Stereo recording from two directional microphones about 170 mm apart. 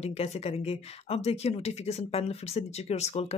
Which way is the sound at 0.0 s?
40° left (ahead or behind).